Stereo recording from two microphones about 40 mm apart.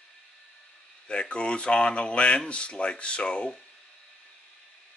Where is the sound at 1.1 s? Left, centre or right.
Left.